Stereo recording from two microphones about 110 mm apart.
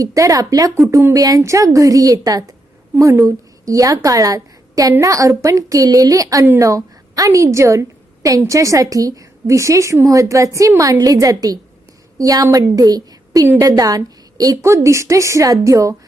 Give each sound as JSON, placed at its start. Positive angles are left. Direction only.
{"t": 0.0, "sound": "a woman's voice", "side_deg": -30}